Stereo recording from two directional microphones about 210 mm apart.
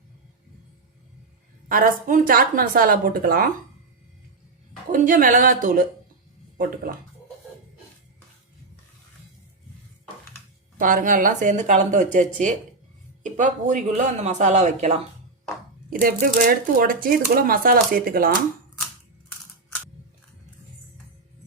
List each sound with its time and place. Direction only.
1.6 s a woman's voice: 40° right (ahead or behind)
4.9 s a woman's voice: 40° right (ahead or behind)
10.8 s a woman's voice: 40° right (ahead or behind)
15.9 s speech: 45° right (ahead or behind)